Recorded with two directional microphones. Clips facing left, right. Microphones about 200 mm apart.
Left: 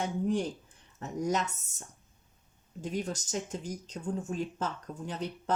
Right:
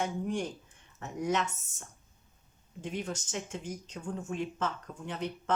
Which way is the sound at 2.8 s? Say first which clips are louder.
Left 2 dB; 40° left (ahead or behind).